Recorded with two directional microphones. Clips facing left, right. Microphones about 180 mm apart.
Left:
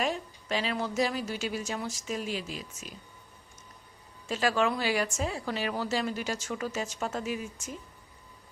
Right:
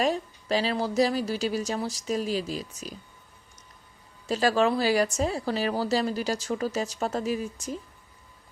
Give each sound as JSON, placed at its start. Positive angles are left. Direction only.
{"t": 0.0, "sound": "a woman's voice", "side_deg": -35}
{"t": 4.3, "sound": "a woman's voice", "side_deg": -35}